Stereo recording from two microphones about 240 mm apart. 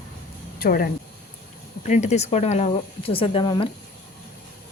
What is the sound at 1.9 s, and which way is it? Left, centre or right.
Speech, left.